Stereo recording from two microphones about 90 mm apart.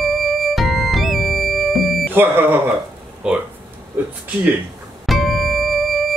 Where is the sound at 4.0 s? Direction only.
20° right (ahead or behind).